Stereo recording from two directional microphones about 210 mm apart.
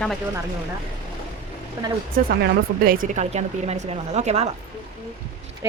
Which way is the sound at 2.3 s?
50° right (ahead or behind).